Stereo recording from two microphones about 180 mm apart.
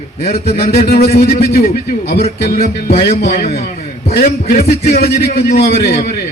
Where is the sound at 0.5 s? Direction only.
35° left (ahead or behind).